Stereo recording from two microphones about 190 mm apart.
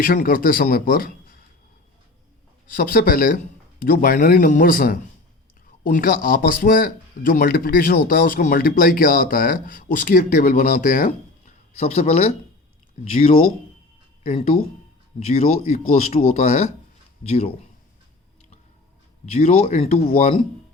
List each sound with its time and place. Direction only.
0.0 s speech: 45° left (ahead or behind)
2.6 s speech: 45° left (ahead or behind)
19.2 s speech: 35° left (ahead or behind)